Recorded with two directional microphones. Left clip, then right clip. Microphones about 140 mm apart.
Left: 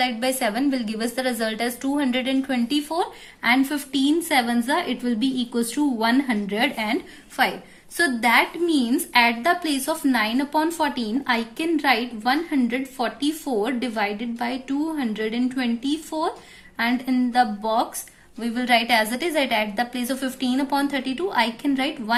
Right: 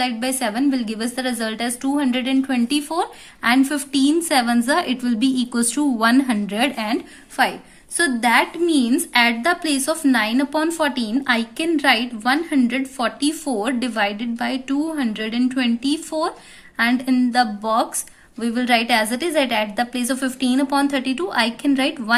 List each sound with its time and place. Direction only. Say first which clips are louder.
0.0 s a woman's voice: even; 20° right (ahead or behind); by 22.1 s 40° right (ahead or behind)